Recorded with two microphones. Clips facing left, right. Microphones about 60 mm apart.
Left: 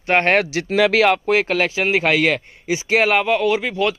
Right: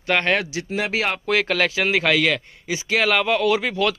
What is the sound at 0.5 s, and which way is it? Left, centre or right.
Speech, left.